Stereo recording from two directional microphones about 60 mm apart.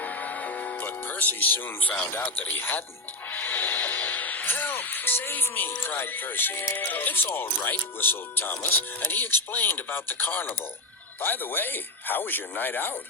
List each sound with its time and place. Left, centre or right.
0.0 s music: left
2.1 s speech: left
3.2 s music: left
5.8 s speech: left